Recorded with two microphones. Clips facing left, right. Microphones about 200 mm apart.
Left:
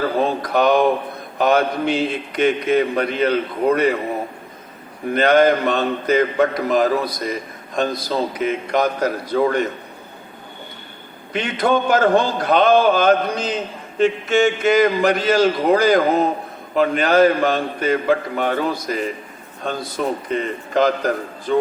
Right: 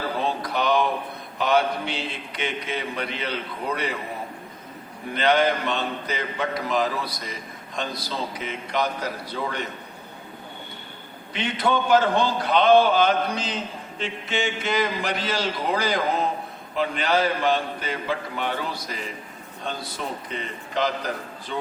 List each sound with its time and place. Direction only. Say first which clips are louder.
0.2 s a man's voice: left 8 dB; 45° left (ahead or behind)
5.1 s a man's voice: left 7 dB; 45° left (ahead or behind)
11.3 s a man's voice: left 5 dB; 45° left (ahead or behind)